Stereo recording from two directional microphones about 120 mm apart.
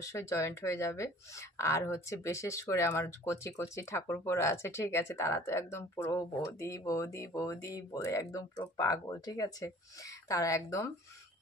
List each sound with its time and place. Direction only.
0.0 s speech: 25° left (ahead or behind)